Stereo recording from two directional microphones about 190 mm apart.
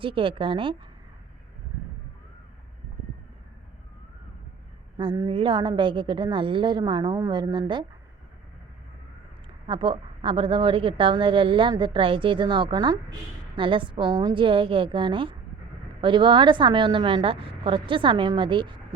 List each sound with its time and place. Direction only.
0.0 s a woman's voice: 25° right (ahead or behind)
4.9 s a woman's voice: 20° right (ahead or behind)
9.6 s a woman's voice: 25° right (ahead or behind)